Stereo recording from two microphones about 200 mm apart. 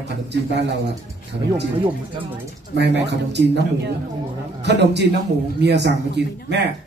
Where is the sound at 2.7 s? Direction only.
60° right (ahead or behind).